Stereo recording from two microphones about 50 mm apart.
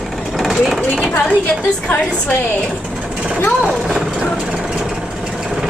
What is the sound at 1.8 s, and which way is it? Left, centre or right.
Speech, left.